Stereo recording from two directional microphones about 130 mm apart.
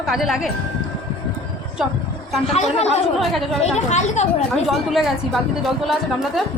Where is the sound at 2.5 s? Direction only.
55° left (ahead or behind).